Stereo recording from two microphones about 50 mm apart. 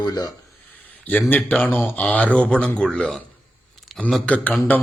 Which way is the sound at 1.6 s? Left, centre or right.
Left.